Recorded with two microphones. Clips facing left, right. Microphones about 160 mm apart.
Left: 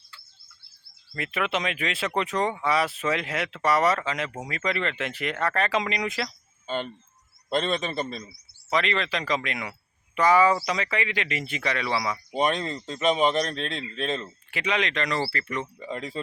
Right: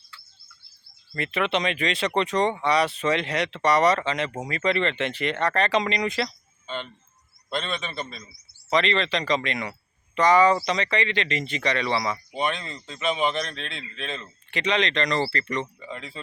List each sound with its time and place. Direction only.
1.1 s speech: 5° left (ahead or behind)
6.7 s speech: 45° left (ahead or behind)
8.3 s speech: 5° left (ahead or behind)
12.3 s speech: 40° left (ahead or behind)
14.5 s speech: 5° left (ahead or behind)
15.8 s speech: 40° left (ahead or behind)